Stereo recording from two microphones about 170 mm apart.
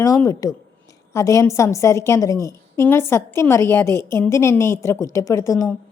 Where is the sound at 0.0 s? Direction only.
20° left (ahead or behind).